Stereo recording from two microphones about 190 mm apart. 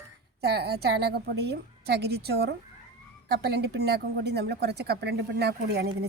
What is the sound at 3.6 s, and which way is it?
Speech, 60° right (ahead or behind).